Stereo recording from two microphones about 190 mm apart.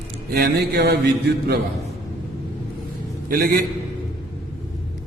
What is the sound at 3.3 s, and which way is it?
Speech, 50° right (ahead or behind).